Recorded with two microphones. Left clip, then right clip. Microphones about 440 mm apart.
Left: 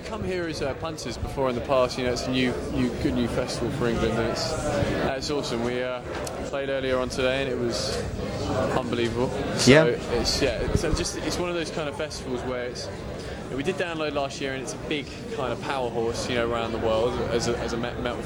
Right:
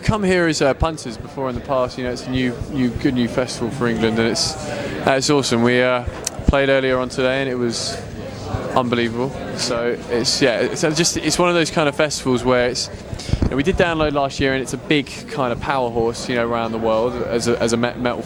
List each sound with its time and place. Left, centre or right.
0.1 s speech: right
1.5 s speech: right